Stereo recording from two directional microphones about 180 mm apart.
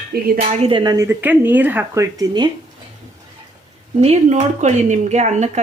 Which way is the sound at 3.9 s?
40° right (ahead or behind).